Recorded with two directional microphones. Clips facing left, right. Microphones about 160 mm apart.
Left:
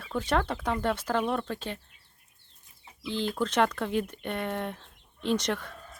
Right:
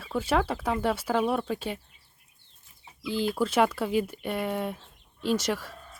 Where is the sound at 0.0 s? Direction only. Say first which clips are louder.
Right 2 dB; 5° right (ahead or behind).